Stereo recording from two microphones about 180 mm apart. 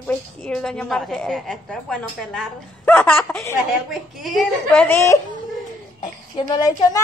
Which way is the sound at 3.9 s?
Centre (ahead or behind).